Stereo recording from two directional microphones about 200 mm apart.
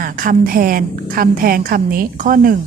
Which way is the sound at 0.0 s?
45° right (ahead or behind).